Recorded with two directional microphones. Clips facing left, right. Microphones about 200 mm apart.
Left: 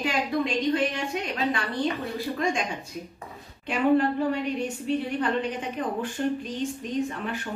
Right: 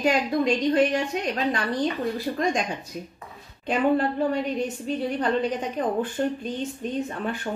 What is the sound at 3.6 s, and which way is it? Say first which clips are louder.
A woman's voice: even; 35° right (ahead or behind).